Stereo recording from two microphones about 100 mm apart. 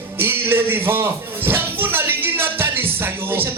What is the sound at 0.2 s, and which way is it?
Speech, 20° right (ahead or behind).